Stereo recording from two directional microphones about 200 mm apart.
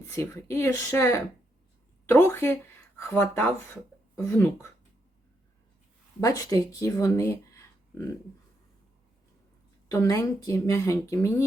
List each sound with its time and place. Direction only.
0.1 s speech: 15° left (ahead or behind)
6.1 s speech: 15° left (ahead or behind)
9.9 s speech: 15° left (ahead or behind)